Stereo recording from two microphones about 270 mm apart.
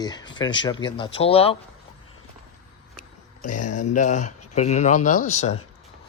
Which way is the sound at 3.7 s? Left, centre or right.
Left.